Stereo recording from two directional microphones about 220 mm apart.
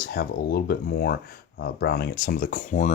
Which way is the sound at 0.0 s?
45° left (ahead or behind).